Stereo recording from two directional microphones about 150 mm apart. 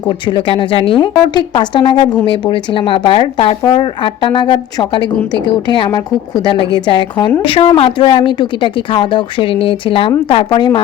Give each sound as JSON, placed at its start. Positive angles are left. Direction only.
{"t": 0.3, "sound": "speech", "side_deg": 35}